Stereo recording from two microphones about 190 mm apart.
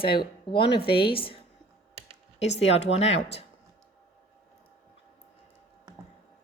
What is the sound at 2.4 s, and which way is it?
Speech, 35° left (ahead or behind).